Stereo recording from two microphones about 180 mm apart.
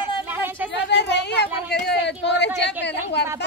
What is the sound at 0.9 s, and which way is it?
Speech, 75° left (ahead or behind).